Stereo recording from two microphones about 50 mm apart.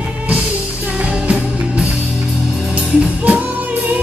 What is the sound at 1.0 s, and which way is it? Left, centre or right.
Music, right.